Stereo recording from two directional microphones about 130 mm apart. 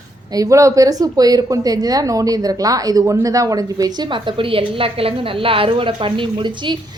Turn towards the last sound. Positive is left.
turn(degrees=-40)  # may be behind; listen again after turning